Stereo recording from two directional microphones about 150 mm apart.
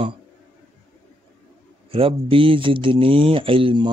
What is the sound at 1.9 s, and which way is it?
Speech, 40° right (ahead or behind).